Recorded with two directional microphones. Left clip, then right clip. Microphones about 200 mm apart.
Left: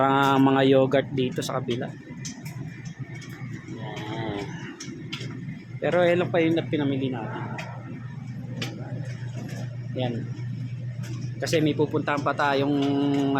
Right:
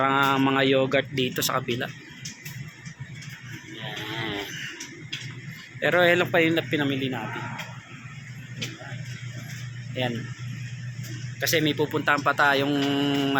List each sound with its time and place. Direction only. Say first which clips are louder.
0.0 s speech: left 1 dB; 20° left (ahead or behind)
1.1 s speech: right 2 dB; 5° left (ahead or behind)
4.1 s a sound: right 1 dB; 10° left (ahead or behind)
5.8 s speech: right 2 dB; centre (ahead or behind)
11.3 s speech: even; centre (ahead or behind)